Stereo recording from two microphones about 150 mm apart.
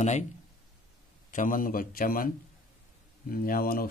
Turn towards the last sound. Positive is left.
turn(degrees=80)